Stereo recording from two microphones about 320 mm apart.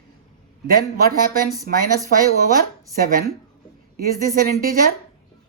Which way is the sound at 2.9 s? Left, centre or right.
Right.